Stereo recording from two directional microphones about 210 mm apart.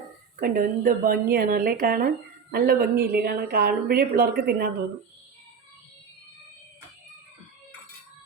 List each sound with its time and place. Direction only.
0.3 s speech: 45° right (ahead or behind)